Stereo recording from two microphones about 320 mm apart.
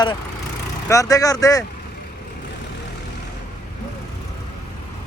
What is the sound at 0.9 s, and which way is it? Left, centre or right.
Speech, centre.